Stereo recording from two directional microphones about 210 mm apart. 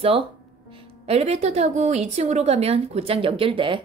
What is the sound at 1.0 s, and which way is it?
A woman's voice, 30° right (ahead or behind).